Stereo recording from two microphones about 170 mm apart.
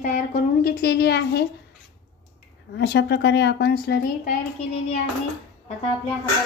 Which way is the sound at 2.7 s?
90° left.